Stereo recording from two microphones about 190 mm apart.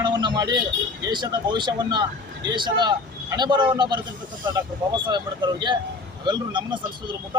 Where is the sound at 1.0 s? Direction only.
25° right (ahead or behind).